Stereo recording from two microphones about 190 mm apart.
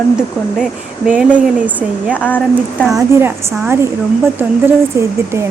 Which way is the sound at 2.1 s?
10° left (ahead or behind).